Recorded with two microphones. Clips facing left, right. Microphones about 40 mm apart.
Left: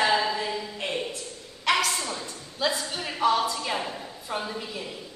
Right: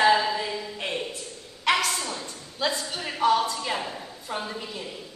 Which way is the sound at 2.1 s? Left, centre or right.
Centre.